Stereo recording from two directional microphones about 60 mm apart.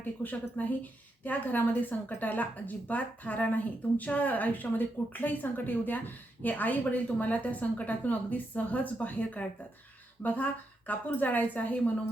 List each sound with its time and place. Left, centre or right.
0.0 s speech: left